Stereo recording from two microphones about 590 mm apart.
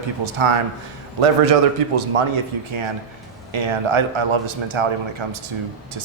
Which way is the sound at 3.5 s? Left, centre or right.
Right.